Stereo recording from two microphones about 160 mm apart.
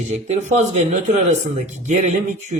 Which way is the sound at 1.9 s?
50° right (ahead or behind).